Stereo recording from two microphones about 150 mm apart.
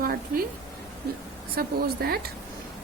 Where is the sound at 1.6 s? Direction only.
90° right.